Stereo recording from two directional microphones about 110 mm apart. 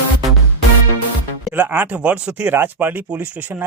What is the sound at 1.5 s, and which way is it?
Speech, 20° right (ahead or behind).